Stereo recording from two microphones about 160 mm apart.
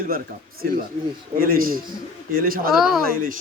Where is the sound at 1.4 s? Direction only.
65° right (ahead or behind).